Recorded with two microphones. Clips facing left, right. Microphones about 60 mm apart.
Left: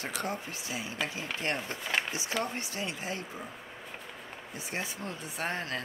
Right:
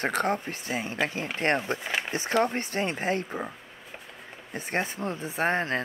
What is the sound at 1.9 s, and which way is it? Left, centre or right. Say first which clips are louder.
Speech: right 3 dB; right.